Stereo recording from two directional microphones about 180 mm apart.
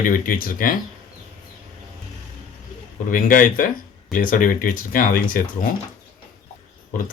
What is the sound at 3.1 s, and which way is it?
Speech, 50° left (ahead or behind).